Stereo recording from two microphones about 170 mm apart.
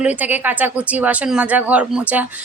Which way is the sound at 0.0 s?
10° right (ahead or behind).